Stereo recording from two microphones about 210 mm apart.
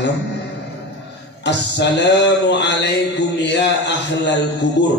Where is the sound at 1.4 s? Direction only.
55° left (ahead or behind).